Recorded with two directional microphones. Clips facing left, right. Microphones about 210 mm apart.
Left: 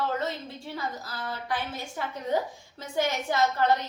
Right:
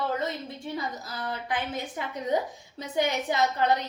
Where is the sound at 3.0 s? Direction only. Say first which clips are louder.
Even; 20° right (ahead or behind).